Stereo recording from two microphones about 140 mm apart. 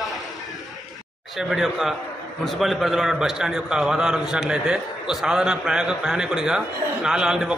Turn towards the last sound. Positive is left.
turn(degrees=-5)  # may be behind; listen again after turning